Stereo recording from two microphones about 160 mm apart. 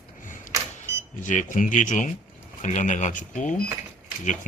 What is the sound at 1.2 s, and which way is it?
Speech, 55° left (ahead or behind).